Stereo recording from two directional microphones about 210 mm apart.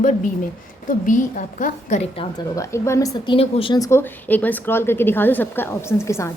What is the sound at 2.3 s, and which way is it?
Speech, 15° left (ahead or behind).